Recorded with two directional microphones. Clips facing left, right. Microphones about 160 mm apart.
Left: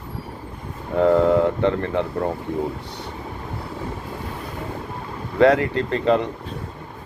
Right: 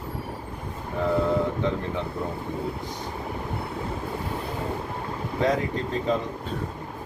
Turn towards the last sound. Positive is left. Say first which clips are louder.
# left 6 dB
turn(degrees=70)  # may be behind; listen again after turning